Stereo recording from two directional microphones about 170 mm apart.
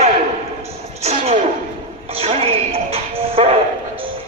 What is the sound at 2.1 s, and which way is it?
Music, 35° right (ahead or behind).